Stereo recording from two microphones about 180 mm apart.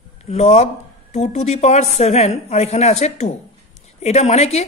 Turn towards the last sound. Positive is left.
turn(degrees=35)  # may be behind; listen again after turning